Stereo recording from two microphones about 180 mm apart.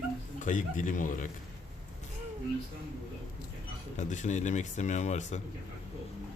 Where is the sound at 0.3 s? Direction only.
45° left (ahead or behind).